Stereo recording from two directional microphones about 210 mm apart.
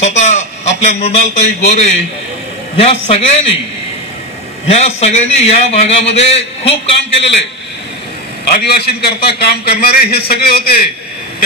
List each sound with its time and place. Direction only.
0.0 s a man's voice: 35° left (ahead or behind)
4.6 s a man's voice: 30° left (ahead or behind)
8.6 s a man's voice: 50° left (ahead or behind)